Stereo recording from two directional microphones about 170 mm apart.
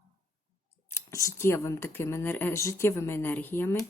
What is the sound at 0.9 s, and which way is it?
Speech, 15° left (ahead or behind).